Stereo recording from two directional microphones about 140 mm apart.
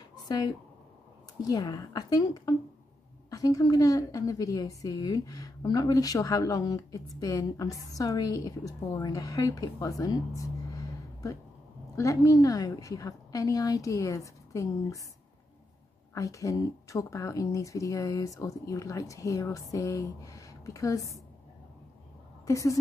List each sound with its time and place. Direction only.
0.1 s a sound: 25° left (ahead or behind)
1.4 s a woman's voice: 30° left (ahead or behind)
11.9 s a woman's voice: 25° left (ahead or behind)
16.2 s a woman's voice: 25° left (ahead or behind)
22.5 s a woman's voice: 20° left (ahead or behind)